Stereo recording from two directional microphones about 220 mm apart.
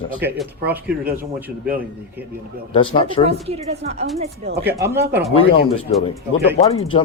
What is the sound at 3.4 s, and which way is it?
Speech, 30° right (ahead or behind).